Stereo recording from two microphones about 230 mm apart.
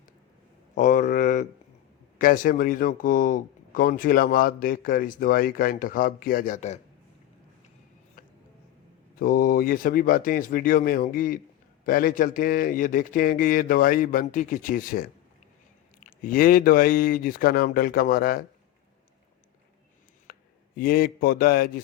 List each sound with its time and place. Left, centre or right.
0.8 s speech: left
8.2 s music: left
9.1 s speech: left
16.0 s speech: left
20.3 s a sound: left
20.7 s speech: left